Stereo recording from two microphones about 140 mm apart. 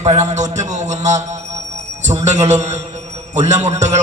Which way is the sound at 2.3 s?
55° right (ahead or behind).